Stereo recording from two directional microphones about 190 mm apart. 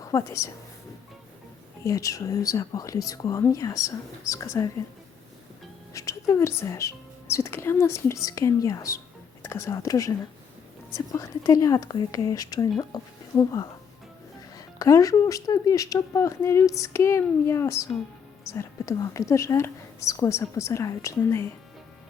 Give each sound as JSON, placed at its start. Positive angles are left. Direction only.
{"t": 0.0, "sound": "a woman's voice", "side_deg": 15}
{"t": 1.8, "sound": "speech", "side_deg": 15}
{"t": 5.9, "sound": "speech", "side_deg": 15}
{"t": 14.8, "sound": "speech", "side_deg": 15}